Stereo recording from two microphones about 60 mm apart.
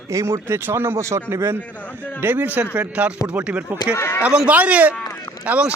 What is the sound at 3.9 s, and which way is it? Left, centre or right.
Speech, left.